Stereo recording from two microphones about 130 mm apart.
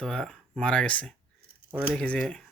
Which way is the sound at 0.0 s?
5° left (ahead or behind).